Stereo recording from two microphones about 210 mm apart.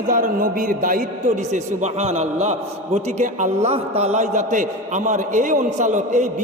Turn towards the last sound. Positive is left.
turn(degrees=-35)  # may be behind; listen again after turning